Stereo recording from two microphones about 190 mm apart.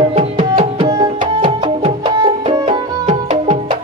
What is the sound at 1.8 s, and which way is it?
Music, 30° right (ahead or behind).